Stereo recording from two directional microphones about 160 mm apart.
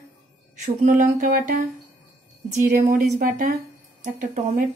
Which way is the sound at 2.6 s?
60° right (ahead or behind).